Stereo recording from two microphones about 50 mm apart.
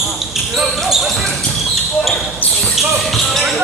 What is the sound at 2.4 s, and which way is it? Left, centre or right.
Basketball bounce, left.